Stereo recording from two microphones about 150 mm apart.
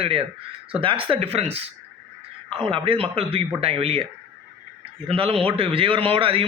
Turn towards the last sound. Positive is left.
turn(degrees=-40)  # may be behind; listen again after turning